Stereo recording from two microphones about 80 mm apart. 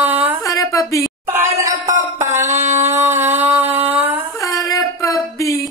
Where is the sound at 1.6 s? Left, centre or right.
Right.